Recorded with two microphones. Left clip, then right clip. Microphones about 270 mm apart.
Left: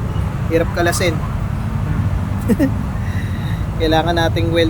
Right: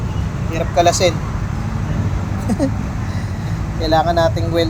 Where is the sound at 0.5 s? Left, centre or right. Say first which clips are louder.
Right 2 dB; centre.